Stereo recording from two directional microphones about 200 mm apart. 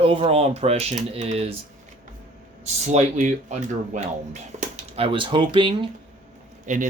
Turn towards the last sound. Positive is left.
turn(degrees=-40)  # may be behind; listen again after turning